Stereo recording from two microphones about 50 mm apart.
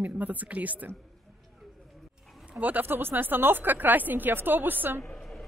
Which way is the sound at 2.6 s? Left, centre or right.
Right.